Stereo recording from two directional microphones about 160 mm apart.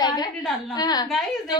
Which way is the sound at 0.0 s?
25° left (ahead or behind).